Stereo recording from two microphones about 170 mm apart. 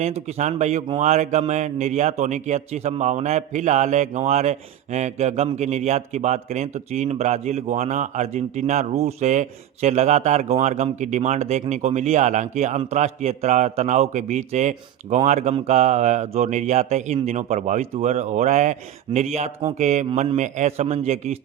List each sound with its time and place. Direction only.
0.0 s a man's voice: 40° right (ahead or behind)